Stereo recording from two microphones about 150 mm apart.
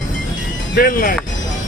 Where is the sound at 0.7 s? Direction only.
70° left (ahead or behind).